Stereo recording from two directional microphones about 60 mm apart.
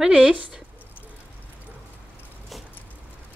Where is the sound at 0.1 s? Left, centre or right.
Centre.